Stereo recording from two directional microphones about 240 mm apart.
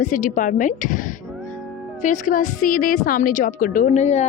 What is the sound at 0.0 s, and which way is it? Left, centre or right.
Speech, left.